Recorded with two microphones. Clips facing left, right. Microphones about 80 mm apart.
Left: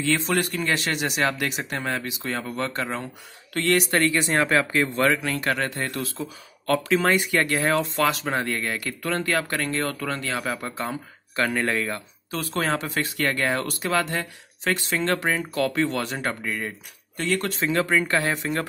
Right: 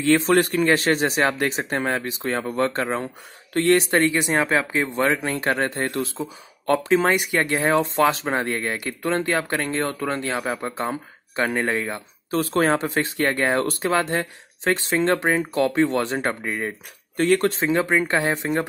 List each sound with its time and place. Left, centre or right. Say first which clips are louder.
0.0 s speech: right 6 dB; right; by 5.2 s centre
5.2 s speech: right 3 dB; right
12.3 s speech: right 6 dB; right